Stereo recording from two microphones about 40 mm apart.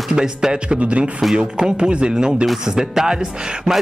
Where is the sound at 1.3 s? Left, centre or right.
Centre.